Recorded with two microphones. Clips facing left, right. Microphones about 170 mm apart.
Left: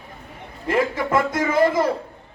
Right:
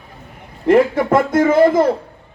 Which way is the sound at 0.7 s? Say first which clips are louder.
Right 8 dB; 50° right (ahead or behind).